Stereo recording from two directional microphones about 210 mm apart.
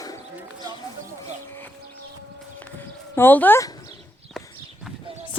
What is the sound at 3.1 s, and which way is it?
Speech, 10° left (ahead or behind).